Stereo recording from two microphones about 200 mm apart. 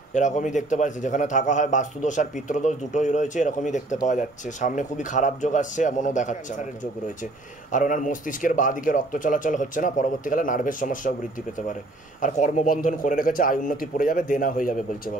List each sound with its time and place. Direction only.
0.1 s a man's voice: 40° left (ahead or behind)
7.7 s a man's voice: 40° left (ahead or behind)